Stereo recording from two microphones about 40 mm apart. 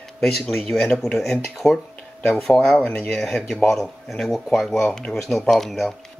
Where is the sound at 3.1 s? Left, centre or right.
Centre.